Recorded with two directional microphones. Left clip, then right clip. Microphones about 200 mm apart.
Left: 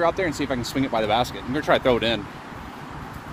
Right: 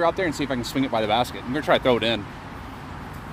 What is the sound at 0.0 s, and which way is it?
Speech, 30° right (ahead or behind).